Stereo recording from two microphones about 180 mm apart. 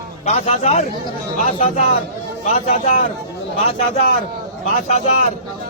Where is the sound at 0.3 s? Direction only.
35° left (ahead or behind).